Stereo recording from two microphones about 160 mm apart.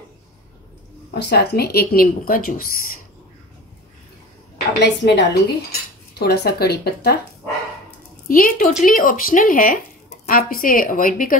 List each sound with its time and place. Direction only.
1.1 s speech: 90° left; by 3.0 s 65° left (ahead or behind)
4.7 s cutlery: 90° left
8.3 s speech: 60° left (ahead or behind)